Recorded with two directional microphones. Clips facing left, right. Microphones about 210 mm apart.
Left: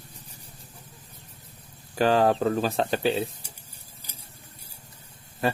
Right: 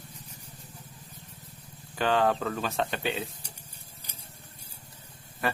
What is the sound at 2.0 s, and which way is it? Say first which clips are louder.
Speech: left 5 dB; 35° left (ahead or behind).